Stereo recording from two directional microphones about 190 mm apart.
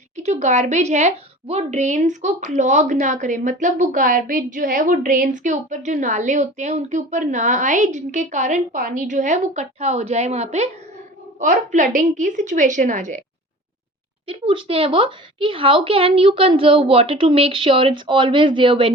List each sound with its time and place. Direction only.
0.2 s a woman's voice: 35° right (ahead or behind)
14.3 s a woman's voice: 30° right (ahead or behind)